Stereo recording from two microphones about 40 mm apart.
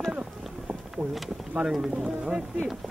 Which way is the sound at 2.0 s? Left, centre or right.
Centre.